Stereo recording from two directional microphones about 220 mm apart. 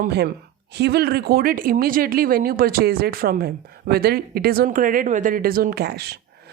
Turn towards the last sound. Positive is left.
turn(degrees=-45)  # may be behind; listen again after turning